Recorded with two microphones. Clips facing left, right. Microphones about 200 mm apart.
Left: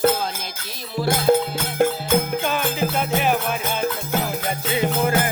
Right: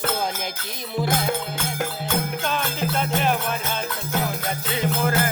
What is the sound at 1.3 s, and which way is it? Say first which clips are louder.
Music: left 10 dB; 40° left (ahead or behind).